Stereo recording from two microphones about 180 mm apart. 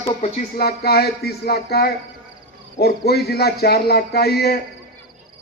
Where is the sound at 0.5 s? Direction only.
60° left (ahead or behind).